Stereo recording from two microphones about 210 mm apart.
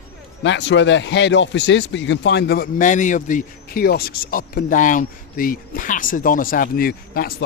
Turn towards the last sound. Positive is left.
turn(degrees=45)  # may be behind; listen again after turning